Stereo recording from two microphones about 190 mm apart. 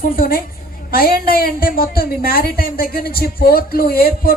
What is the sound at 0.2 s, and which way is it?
Speech, 50° left (ahead or behind).